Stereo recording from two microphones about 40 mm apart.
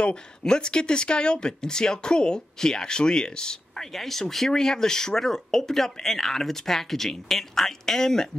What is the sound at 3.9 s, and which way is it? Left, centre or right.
Speech, centre.